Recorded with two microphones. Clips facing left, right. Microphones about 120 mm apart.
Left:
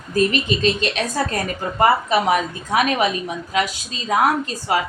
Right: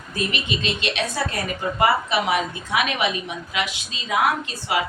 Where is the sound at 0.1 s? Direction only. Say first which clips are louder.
Left 8 dB; 40° left (ahead or behind).